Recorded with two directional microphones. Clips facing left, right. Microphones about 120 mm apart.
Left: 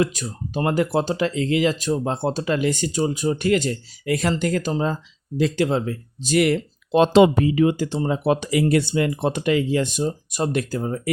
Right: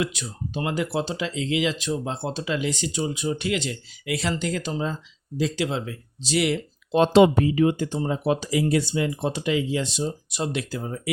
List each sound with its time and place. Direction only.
0.0 s speech: 45° left (ahead or behind)
7.0 s speech: 90° left; by 11.1 s 45° left (ahead or behind)